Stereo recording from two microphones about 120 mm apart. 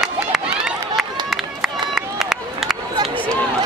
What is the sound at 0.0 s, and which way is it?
Run, centre (ahead or behind).